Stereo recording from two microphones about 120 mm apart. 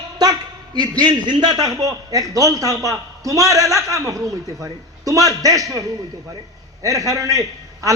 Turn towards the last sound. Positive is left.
turn(degrees=-30)  # may be behind; listen again after turning